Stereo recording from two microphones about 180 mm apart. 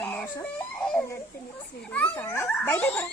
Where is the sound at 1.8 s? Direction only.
5° left (ahead or behind).